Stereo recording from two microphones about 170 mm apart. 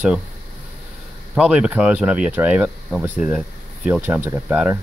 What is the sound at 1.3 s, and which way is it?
Speech, 5° right (ahead or behind).